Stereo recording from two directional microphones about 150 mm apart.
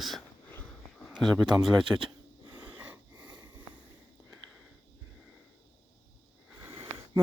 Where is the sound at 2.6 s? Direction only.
10° right (ahead or behind).